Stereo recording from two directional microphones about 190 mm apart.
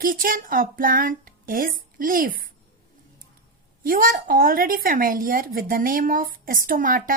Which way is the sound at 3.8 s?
45° right (ahead or behind).